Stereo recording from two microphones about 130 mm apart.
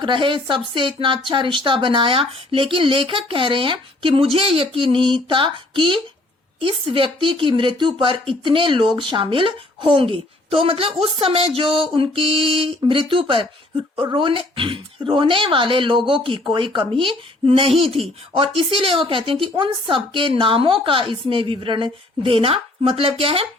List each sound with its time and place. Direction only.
0.0 s speech: 40° right (ahead or behind)